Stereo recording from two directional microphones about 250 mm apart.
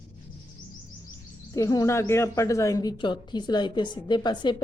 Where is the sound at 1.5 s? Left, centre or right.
Centre.